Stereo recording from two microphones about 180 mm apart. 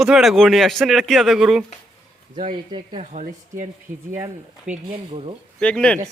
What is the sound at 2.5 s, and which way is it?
Speech, 25° right (ahead or behind).